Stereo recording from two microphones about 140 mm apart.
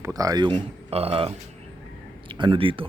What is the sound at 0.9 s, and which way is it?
Speech, 45° right (ahead or behind).